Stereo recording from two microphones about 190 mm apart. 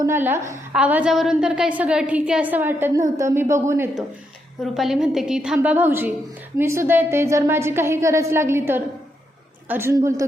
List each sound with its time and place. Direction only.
0.0 s a woman's voice: 10° right (ahead or behind)
4.6 s a woman's voice: centre (ahead or behind)